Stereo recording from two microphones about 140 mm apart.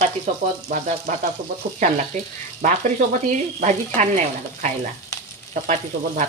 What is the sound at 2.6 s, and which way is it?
Frying, 75° right (ahead or behind).